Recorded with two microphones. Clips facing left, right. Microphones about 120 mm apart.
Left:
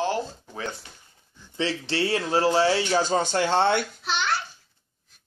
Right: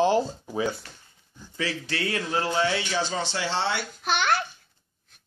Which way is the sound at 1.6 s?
30° left (ahead or behind).